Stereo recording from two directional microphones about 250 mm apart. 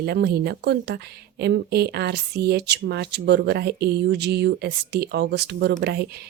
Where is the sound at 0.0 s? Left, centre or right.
Right.